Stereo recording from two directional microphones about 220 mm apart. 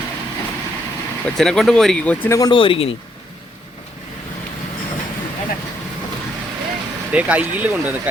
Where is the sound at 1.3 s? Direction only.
Centre (ahead or behind); by 2.9 s 25° left (ahead or behind).